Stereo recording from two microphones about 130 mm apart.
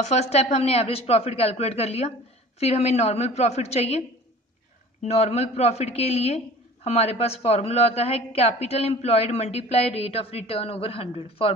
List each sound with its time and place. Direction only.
0.0 s a man's voice: 60° left (ahead or behind)
5.0 s a man's voice: 55° left (ahead or behind)